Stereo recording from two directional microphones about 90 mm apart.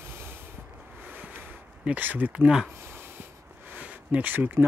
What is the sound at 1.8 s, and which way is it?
Speech, 15° right (ahead or behind).